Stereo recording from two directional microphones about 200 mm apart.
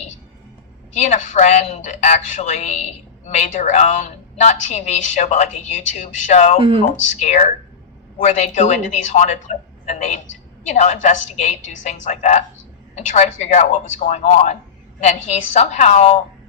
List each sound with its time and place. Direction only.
0.9 s a woman's voice: 35° left (ahead or behind)